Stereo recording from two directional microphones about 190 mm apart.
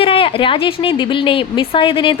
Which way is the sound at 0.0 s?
30° left (ahead or behind).